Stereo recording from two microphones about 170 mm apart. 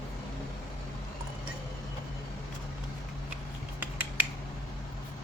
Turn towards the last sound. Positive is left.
turn(degrees=-10)  # may be behind; listen again after turning